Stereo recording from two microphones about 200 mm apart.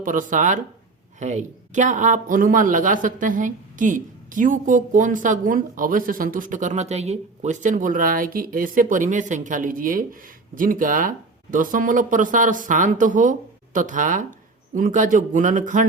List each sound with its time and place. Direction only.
0.0 s speech: 40° right (ahead or behind)